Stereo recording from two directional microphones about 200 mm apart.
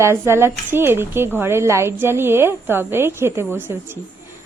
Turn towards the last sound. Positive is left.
turn(degrees=-10)  # may be behind; listen again after turning